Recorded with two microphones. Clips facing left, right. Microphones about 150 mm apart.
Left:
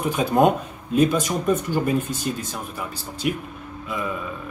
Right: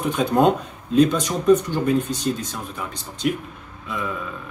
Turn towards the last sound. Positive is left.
turn(degrees=0)  # may be behind; listen again after turning